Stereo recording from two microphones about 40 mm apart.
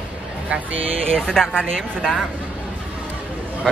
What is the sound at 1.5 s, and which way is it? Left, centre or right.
Speech, centre.